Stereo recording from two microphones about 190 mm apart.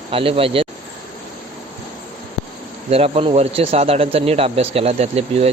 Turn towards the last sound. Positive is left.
turn(degrees=-35)  # may be behind; listen again after turning